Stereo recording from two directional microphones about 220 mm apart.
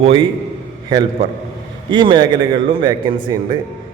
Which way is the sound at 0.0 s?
25° right (ahead or behind).